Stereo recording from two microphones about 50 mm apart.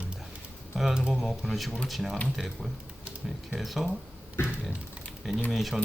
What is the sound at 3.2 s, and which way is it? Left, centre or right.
Speech, centre.